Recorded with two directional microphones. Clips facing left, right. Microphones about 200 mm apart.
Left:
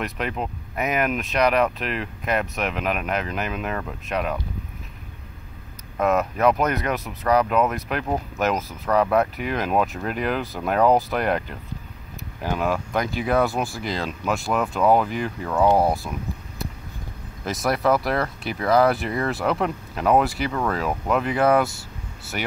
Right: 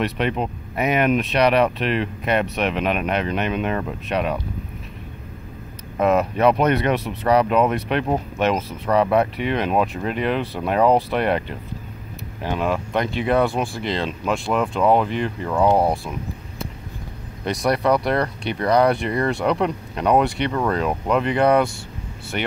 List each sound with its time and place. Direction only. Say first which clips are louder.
0.0 s speech: right 5 dB; centre (ahead or behind)
2.4 s speech: right 4 dB; 30° right (ahead or behind)
3.1 s speech: right 4 dB; centre (ahead or behind)
5.9 s speech: right 3 dB; centre (ahead or behind)
17.5 s speech: right 2 dB; centre (ahead or behind)